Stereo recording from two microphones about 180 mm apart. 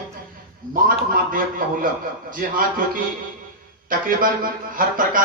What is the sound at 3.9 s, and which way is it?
Speech, 50° right (ahead or behind).